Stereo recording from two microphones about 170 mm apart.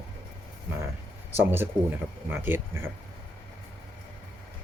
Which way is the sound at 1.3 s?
10° right (ahead or behind).